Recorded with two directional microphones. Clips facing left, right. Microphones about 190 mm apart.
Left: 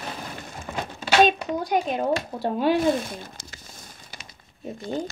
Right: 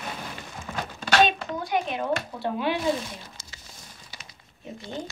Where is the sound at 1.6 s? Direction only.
40° left (ahead or behind).